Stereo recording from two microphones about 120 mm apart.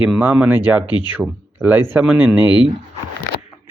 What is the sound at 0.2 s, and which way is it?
A man's voice, 15° right (ahead or behind).